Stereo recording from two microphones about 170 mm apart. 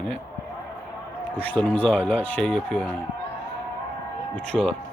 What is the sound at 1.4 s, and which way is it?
Speech, 10° left (ahead or behind).